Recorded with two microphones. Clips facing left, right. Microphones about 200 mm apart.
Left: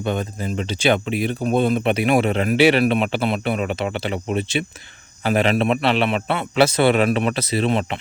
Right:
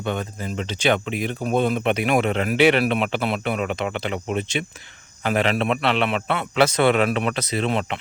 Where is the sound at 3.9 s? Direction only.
35° left (ahead or behind).